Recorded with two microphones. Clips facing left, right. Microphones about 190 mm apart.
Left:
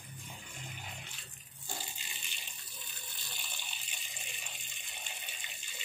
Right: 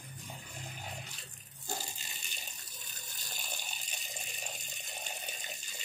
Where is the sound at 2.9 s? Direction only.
40° right (ahead or behind).